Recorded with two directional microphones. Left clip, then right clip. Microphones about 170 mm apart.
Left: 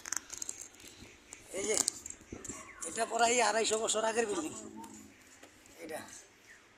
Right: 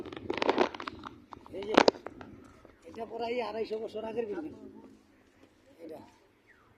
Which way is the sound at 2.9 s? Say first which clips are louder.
Left 5 dB; 10° left (ahead or behind).